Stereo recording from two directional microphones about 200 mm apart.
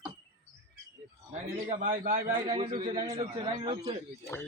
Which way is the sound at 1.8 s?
45° right (ahead or behind).